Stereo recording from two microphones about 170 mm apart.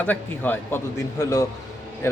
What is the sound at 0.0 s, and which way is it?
A man's voice, 10° left (ahead or behind).